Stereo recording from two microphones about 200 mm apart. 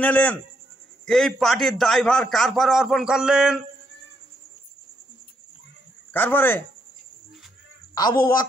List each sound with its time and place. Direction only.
0.0 s a man's voice: 10° left (ahead or behind)
6.1 s speech: 10° left (ahead or behind)
7.9 s a woman's voice: 20° left (ahead or behind)